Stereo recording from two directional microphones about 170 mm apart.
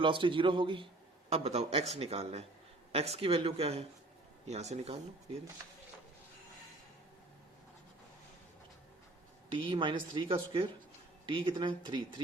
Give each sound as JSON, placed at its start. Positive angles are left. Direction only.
{"t": 0.0, "sound": "a man's voice", "side_deg": -30}
{"t": 9.5, "sound": "speech", "side_deg": -30}